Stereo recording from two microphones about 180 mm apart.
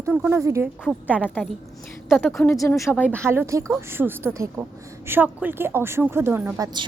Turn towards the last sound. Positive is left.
turn(degrees=-10)  # may be behind; listen again after turning